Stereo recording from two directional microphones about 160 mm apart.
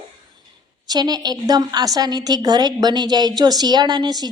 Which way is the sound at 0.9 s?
25° right (ahead or behind).